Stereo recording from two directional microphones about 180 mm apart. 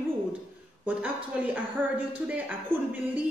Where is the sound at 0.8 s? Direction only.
10° right (ahead or behind).